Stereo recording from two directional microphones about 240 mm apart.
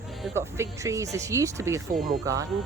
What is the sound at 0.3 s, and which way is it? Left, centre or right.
Speech, centre.